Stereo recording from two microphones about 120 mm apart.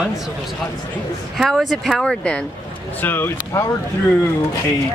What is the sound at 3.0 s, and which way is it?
Speech, 15° left (ahead or behind).